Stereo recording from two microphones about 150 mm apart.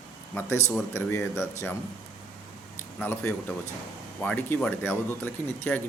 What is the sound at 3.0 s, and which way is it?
Speech, 15° left (ahead or behind).